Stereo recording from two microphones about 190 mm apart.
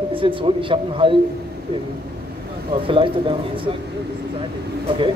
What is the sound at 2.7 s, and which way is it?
A man's voice, 25° right (ahead or behind).